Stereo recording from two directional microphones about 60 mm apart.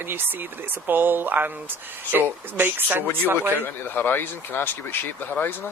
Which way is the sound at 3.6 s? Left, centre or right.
Left.